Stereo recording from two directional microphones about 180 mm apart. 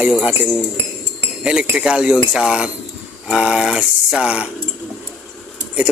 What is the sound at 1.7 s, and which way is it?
Speech, 5° right (ahead or behind).